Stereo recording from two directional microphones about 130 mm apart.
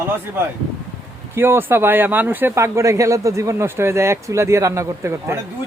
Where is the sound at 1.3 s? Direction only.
20° right (ahead or behind).